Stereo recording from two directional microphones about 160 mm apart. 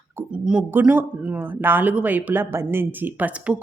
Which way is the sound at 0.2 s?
10° right (ahead or behind).